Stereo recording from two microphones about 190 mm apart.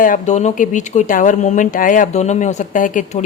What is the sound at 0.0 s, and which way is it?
Speech, 40° left (ahead or behind).